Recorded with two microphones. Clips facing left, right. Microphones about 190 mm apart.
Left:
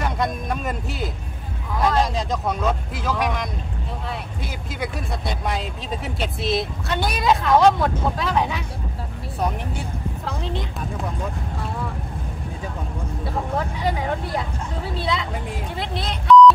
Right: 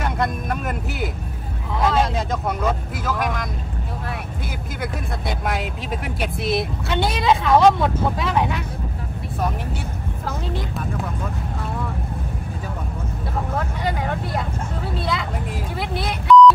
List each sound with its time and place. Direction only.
0.0 s a sound: centre (ahead or behind)
1.8 s vehicle: 5° right (ahead or behind)
4.7 s vehicle: centre (ahead or behind)
6.4 s vehicle: 55° right (ahead or behind)
7.0 s a sound: 25° right (ahead or behind)
7.4 s speech: centre (ahead or behind)
13.8 s vehicle: centre (ahead or behind)
15.8 s beep: 5° right (ahead or behind)